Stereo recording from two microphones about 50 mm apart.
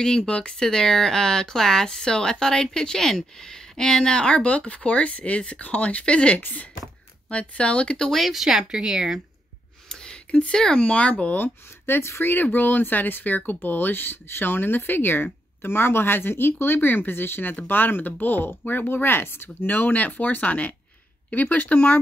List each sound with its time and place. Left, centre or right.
0.0 s speech: centre
6.4 s speech: left
7.2 s speech: left
8.1 s speech: centre
9.8 s a sound: centre
10.8 s speech: left
11.8 s speech: left
12.3 s speech: left
19.6 s speech: left